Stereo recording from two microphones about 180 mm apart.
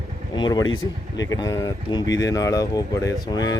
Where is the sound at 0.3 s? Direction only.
25° left (ahead or behind).